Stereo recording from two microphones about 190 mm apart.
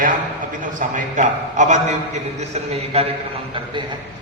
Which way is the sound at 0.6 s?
45° right (ahead or behind).